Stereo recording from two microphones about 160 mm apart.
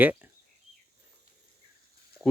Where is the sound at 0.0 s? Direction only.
10° right (ahead or behind).